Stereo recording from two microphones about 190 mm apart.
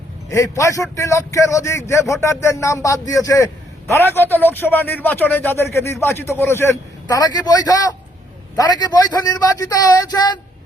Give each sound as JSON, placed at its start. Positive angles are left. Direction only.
{"t": 0.3, "sound": "a man's voice", "side_deg": 15}